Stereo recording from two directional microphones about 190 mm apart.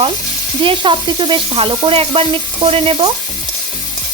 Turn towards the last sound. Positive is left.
turn(degrees=-30)  # may be behind; listen again after turning